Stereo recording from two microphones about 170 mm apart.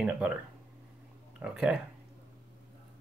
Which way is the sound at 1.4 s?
5° right (ahead or behind).